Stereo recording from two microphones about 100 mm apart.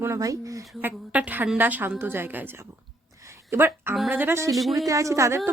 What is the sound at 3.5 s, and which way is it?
A woman's voice, 25° right (ahead or behind).